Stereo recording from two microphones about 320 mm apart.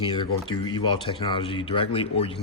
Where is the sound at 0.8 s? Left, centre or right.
Centre.